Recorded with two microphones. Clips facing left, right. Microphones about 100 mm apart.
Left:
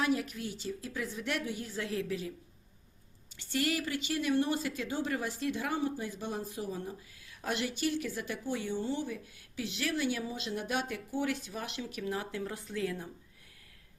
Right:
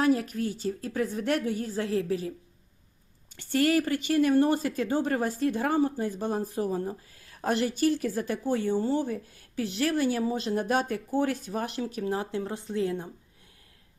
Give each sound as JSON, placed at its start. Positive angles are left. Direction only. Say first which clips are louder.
{"t": 0.0, "sound": "a woman's voice", "louder": "right 7 dB", "side_deg": -40}
{"t": 3.3, "sound": "speech", "louder": "right 9 dB", "side_deg": -50}